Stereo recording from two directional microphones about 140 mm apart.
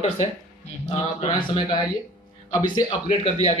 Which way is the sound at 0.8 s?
45° left (ahead or behind).